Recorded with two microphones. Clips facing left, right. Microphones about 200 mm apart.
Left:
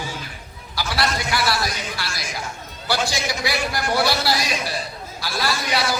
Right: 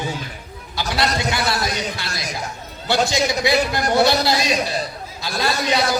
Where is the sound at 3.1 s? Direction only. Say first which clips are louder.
Right 6 dB; 20° right (ahead or behind).